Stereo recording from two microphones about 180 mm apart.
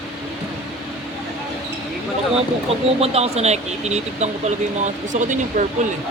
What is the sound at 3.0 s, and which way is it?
Speech, 35° right (ahead or behind).